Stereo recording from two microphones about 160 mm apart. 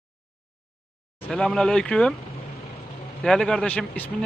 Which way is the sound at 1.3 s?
5° left (ahead or behind).